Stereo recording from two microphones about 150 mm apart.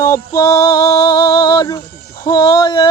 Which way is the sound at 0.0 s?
20° left (ahead or behind).